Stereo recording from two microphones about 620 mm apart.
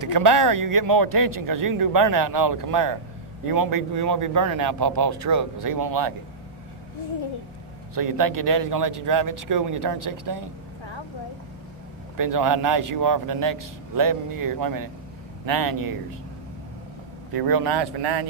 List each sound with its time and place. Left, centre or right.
0.0 s speech: right
7.9 s speech: right
12.1 s speech: right
17.4 s speech: right